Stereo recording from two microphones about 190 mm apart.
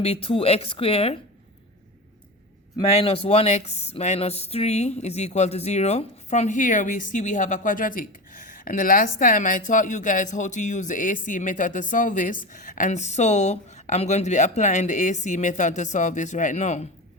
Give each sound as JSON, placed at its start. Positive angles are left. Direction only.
{"t": 0.0, "sound": "speech", "side_deg": 30}
{"t": 2.7, "sound": "speech", "side_deg": 30}